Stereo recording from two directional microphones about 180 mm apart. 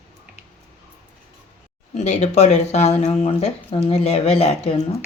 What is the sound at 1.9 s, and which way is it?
Speech, 40° left (ahead or behind).